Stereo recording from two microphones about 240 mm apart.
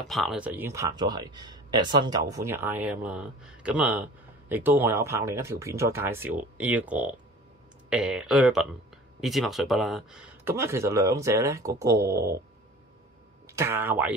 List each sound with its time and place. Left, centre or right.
0.0 s speech: centre
13.5 s speech: centre